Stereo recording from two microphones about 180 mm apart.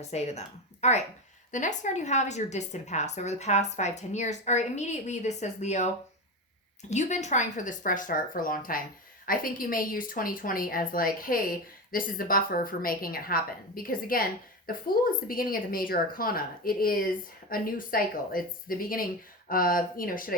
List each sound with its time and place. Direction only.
0.1 s a woman's voice: 40° left (ahead or behind)
6.9 s speech: 40° left (ahead or behind)